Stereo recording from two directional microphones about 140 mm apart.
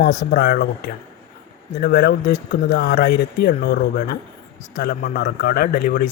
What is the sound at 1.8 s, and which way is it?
A man's voice, 90° left.